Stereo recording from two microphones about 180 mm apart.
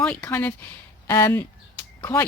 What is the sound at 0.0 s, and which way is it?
Speech, 5° left (ahead or behind).